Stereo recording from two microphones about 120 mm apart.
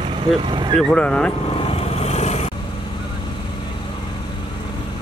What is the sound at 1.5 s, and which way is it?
Vehicle, 55° left (ahead or behind).